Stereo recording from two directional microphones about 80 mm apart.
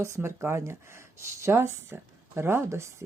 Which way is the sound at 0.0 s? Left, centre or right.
Right.